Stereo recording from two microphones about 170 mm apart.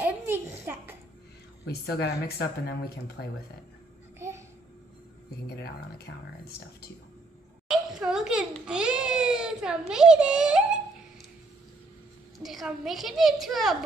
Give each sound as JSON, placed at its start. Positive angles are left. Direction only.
{"t": 0.0, "sound": "a sound", "side_deg": -10}
{"t": 1.7, "sound": "speech", "side_deg": 70}
{"t": 6.4, "sound": "speech", "side_deg": 65}
{"t": 7.6, "sound": "a child's voice", "side_deg": -5}
{"t": 12.4, "sound": "a woman's voice", "side_deg": 0}